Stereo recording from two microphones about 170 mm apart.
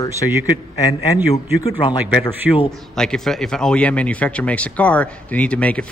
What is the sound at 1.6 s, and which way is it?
Speech, 30° left (ahead or behind).